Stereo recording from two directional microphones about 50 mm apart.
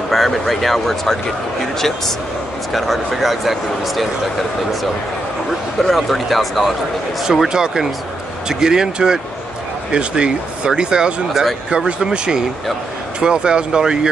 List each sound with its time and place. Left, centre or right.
0.1 s speech: centre
5.8 s speech: centre
7.4 s speech: centre